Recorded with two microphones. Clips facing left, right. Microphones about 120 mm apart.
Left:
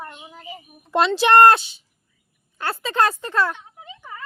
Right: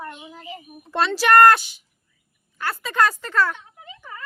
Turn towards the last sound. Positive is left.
turn(degrees=20)  # may be behind; listen again after turning